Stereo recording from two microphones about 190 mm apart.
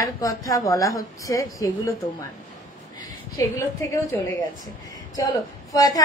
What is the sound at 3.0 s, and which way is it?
A woman's voice, 15° left (ahead or behind).